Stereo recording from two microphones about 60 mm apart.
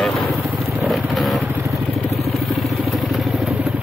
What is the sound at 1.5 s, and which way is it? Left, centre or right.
Vehicle, right.